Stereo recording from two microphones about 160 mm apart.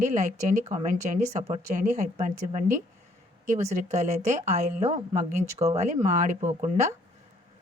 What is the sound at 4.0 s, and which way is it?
Speech, 45° right (ahead or behind).